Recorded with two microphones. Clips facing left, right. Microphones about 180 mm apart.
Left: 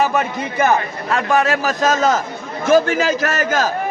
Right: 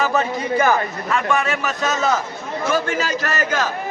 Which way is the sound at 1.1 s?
40° left (ahead or behind).